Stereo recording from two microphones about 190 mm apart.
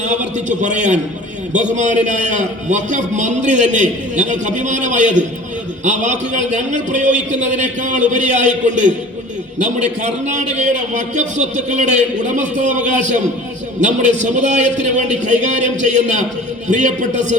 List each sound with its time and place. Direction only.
0.0 s a man's voice: 40° right (ahead or behind)